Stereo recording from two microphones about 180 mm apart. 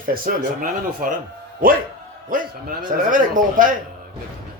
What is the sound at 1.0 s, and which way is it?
Speech, 50° right (ahead or behind).